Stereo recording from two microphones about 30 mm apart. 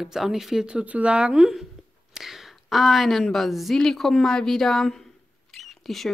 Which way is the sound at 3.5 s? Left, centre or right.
Centre.